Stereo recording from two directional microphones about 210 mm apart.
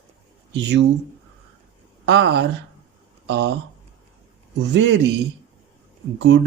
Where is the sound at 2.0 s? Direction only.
55° right (ahead or behind).